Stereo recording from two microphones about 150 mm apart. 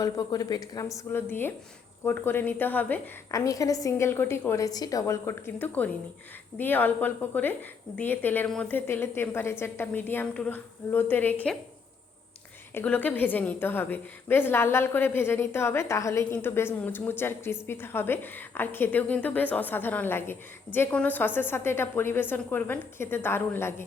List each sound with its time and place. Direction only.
0.0 s a woman's voice: 25° left (ahead or behind)
3.4 s a woman's voice: 20° left (ahead or behind)
12.7 s a woman's voice: 10° left (ahead or behind)